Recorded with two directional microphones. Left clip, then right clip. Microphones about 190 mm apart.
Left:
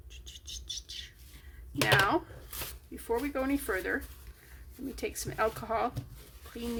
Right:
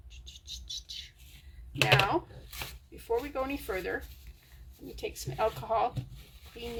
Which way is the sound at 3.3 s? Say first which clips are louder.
Left 2 dB; 30° left (ahead or behind).